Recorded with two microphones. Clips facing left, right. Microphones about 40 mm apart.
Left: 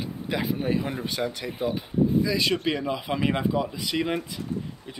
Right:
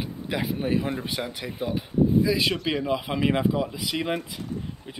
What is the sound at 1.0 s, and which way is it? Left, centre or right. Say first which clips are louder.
Speech: left 2 dB; centre.